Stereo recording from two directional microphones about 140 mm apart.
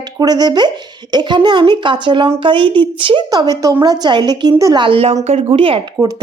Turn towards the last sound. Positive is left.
turn(degrees=-25)  # may be behind; listen again after turning